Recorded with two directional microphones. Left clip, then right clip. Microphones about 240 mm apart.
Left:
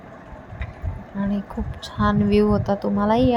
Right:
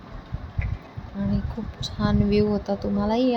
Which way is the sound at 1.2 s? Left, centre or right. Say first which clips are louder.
Left 3 dB; centre.